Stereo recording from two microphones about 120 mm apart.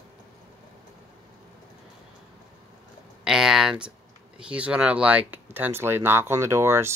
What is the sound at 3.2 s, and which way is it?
Speech, 5° right (ahead or behind).